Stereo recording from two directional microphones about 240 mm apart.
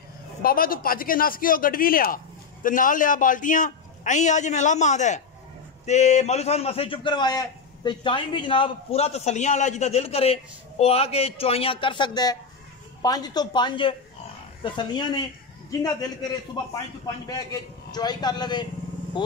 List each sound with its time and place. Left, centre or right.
0.4 s a man's voice: left; by 16.1 s centre
17.3 s a man's voice: centre